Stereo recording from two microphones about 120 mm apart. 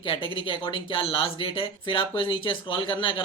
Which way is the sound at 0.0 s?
45° left (ahead or behind).